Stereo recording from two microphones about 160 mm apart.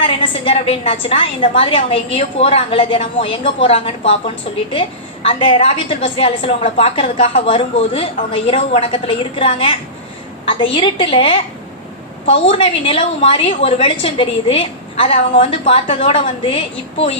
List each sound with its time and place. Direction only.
0.0 s a woman's voice: 35° left (ahead or behind)